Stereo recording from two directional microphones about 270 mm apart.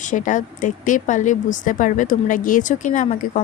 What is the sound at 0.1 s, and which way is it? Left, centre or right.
A woman's voice, left.